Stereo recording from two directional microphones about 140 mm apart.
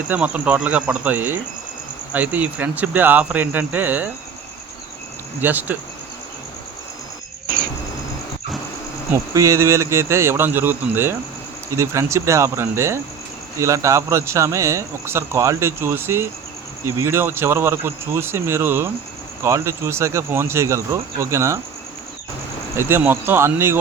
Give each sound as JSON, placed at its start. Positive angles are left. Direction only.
{"t": 0.1, "sound": "speech", "side_deg": -10}
{"t": 5.4, "sound": "speech", "side_deg": -15}
{"t": 9.1, "sound": "a man's voice", "side_deg": -20}
{"t": 22.7, "sound": "speech", "side_deg": -15}